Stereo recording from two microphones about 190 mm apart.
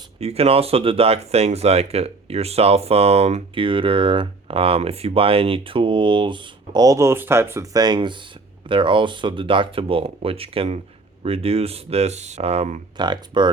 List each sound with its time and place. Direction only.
0.2 s speech: 30° right (ahead or behind)
13.0 s speech: 25° right (ahead or behind)